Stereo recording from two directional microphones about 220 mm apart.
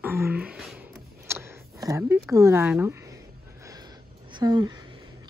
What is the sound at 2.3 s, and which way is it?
Speech, 15° right (ahead or behind).